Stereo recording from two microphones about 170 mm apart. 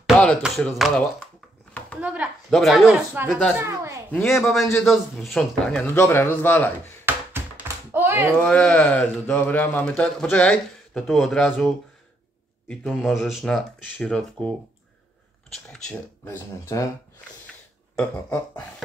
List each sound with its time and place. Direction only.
0.0 s a sound: centre (ahead or behind)
2.0 s speech: 10° right (ahead or behind)
3.5 s a woman's voice: 15° right (ahead or behind)
4.1 s speech: 5° left (ahead or behind)
5.9 s a man's voice: 15° left (ahead or behind)
7.1 s a sound: 10° right (ahead or behind)
8.4 s a man's voice: 5° left (ahead or behind)
15.5 s speech: 5° left (ahead or behind)
16.3 s a man's voice: 20° left (ahead or behind)